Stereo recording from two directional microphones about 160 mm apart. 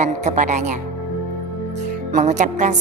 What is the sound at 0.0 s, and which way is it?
Speech, 45° right (ahead or behind).